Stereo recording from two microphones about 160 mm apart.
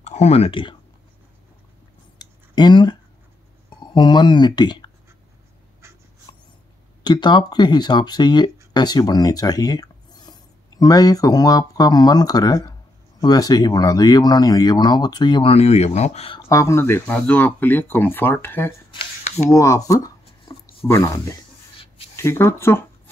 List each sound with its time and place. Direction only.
0.0 s speech: 45° left (ahead or behind)
2.1 s a sound: 25° left (ahead or behind)
3.8 s speech: 30° left (ahead or behind)
6.3 s dog: 30° left (ahead or behind)
7.0 s speech: 25° left (ahead or behind)
15.5 s speech: 40° left (ahead or behind)
16.4 s speech: 20° left (ahead or behind)
18.9 s a sound: 35° left (ahead or behind)
19.5 s speech: 20° left (ahead or behind)